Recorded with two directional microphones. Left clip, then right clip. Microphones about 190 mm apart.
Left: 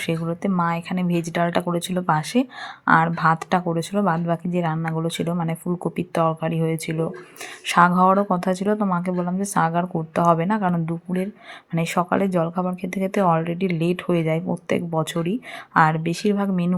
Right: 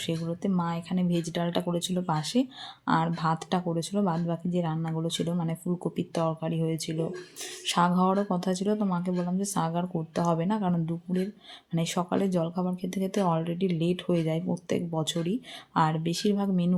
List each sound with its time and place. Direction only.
0.0 s speech: 15° left (ahead or behind)